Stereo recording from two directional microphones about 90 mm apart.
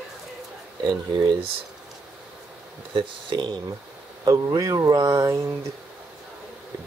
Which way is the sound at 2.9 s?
55° right (ahead or behind).